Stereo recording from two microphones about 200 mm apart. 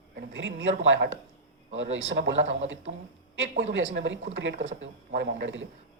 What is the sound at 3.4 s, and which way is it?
Speech, 65° right (ahead or behind).